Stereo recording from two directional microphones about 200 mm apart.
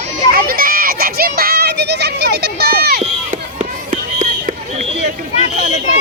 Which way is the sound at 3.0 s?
40° right (ahead or behind).